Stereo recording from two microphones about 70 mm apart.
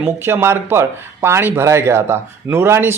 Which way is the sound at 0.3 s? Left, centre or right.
Right.